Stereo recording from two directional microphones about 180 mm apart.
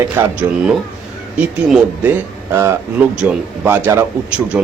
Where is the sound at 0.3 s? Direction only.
5° right (ahead or behind).